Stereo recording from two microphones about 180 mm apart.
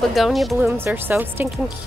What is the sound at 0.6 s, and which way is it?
Speech, 10° right (ahead or behind).